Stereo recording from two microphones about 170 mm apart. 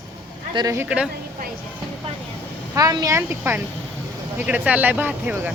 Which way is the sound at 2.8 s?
20° right (ahead or behind).